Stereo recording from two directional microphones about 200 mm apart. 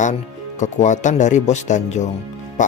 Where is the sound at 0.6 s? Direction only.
35° left (ahead or behind).